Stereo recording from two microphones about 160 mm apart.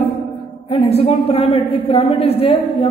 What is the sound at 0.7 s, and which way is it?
A woman's voice, 40° left (ahead or behind).